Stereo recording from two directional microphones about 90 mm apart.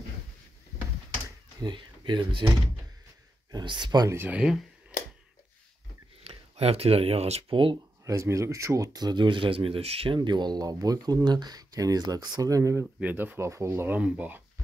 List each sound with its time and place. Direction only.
1.6 s speech: 55° right (ahead or behind)
3.5 s speech: 60° right (ahead or behind)
4.3 s speech: 5° right (ahead or behind)
6.9 s speech: 90° right
8.0 s speech: 35° right (ahead or behind)
13.0 s speech: 20° right (ahead or behind)
13.9 s speech: 15° right (ahead or behind)